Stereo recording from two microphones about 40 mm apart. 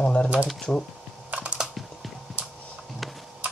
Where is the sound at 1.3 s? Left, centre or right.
Right.